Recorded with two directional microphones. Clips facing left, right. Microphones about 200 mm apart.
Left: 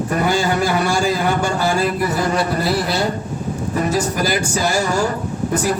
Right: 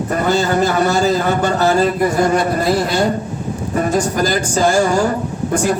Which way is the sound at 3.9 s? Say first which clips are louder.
Right 3 dB; 10° left (ahead or behind).